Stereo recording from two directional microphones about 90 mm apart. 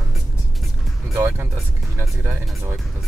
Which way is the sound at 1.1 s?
25° right (ahead or behind).